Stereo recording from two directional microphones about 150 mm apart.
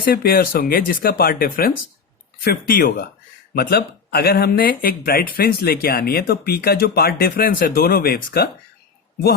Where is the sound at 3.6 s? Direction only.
80° left.